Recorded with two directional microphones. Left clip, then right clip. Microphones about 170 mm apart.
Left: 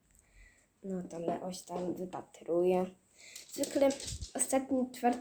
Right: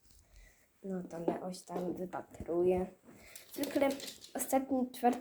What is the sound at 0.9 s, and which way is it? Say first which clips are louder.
Speech: left 1 dB; 15° left (ahead or behind).